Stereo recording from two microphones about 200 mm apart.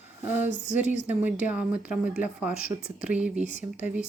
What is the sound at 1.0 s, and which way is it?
Speech, 10° right (ahead or behind).